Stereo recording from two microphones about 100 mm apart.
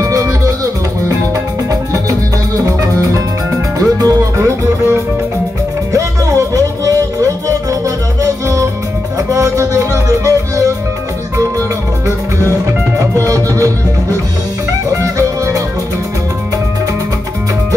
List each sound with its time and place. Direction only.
0.0 s music: 35° right (ahead or behind)
1.7 s music: 35° right (ahead or behind)
5.9 s music: 35° right (ahead or behind)
13.0 s music: 35° right (ahead or behind)
14.9 s music: 30° right (ahead or behind)